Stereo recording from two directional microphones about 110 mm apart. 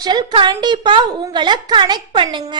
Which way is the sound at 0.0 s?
40° right (ahead or behind).